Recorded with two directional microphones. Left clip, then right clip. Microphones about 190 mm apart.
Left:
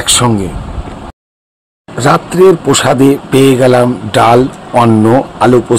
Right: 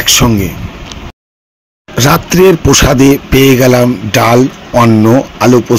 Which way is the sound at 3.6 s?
45° right (ahead or behind).